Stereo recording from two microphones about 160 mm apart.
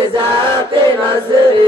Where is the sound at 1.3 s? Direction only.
30° right (ahead or behind).